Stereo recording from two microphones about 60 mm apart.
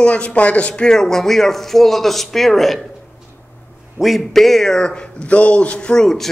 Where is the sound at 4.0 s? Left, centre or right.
Centre.